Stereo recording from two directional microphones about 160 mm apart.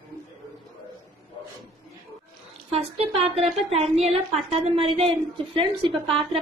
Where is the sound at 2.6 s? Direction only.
40° right (ahead or behind).